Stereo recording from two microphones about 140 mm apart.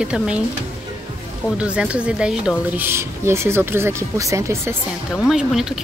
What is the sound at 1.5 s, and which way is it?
Speech, 10° right (ahead or behind).